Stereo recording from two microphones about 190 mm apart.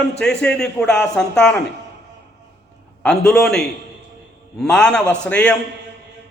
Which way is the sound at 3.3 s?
5° left (ahead or behind).